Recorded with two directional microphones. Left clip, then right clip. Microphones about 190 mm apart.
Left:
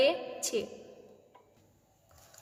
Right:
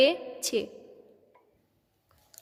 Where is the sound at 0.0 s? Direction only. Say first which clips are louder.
Right 4 dB; 35° right (ahead or behind).